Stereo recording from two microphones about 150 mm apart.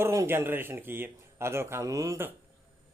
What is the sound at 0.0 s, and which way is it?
Speech, 15° right (ahead or behind).